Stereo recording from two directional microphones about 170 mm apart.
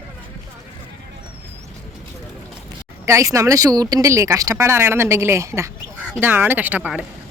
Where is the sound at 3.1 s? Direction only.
20° right (ahead or behind).